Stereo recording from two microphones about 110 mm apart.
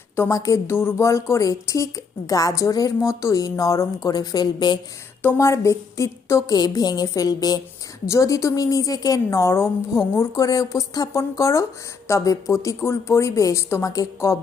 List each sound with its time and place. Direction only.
0.2 s a woman's voice: 30° left (ahead or behind)
5.2 s a woman's voice: 25° left (ahead or behind)
6.6 s a woman's voice: 35° left (ahead or behind)